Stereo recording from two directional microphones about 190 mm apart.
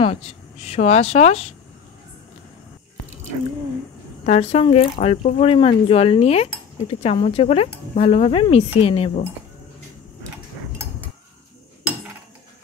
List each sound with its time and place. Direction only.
0.0 s cutlery: 30° left (ahead or behind)
4.3 s cutlery: 35° left (ahead or behind)
8.8 s speech: 30° left (ahead or behind)